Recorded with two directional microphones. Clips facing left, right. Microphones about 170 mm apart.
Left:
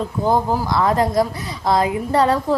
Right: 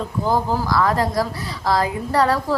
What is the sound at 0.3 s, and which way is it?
A woman's voice, 20° left (ahead or behind).